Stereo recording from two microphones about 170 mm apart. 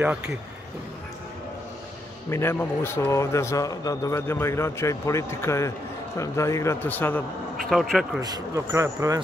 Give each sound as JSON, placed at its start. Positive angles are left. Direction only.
{"t": 0.0, "sound": "a man's voice", "side_deg": -5}
{"t": 2.2, "sound": "a man's voice", "side_deg": 15}
{"t": 8.2, "sound": "speech", "side_deg": -20}